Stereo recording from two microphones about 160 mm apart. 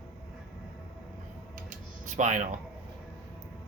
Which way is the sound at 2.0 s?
50° right (ahead or behind).